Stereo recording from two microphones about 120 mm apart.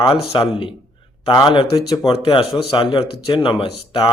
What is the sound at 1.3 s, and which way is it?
Speech, 35° left (ahead or behind).